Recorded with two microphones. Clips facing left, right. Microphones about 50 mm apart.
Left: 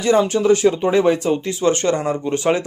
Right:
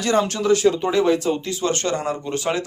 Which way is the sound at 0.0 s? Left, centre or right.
Centre.